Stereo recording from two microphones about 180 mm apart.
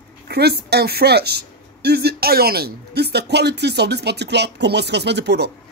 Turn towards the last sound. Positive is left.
turn(degrees=-70)  # may be behind; listen again after turning